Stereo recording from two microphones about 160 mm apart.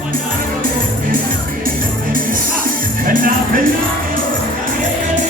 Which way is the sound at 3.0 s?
60° right (ahead or behind).